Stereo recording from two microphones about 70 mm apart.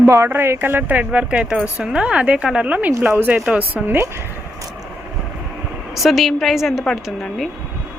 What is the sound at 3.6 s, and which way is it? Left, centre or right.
Speech, right.